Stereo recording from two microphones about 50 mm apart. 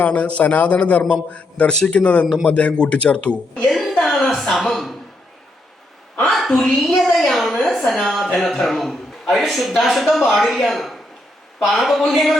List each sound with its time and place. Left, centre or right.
0.0 s a man's voice: left
3.7 s a sound: centre
6.3 s a woman's voice: centre